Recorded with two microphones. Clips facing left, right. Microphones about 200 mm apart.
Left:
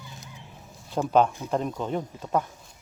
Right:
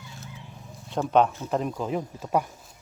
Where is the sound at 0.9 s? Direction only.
Centre (ahead or behind).